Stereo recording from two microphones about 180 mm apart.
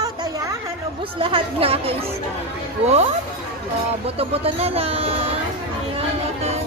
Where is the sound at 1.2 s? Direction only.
30° right (ahead or behind).